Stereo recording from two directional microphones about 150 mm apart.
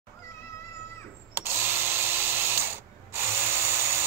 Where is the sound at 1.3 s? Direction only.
15° right (ahead or behind).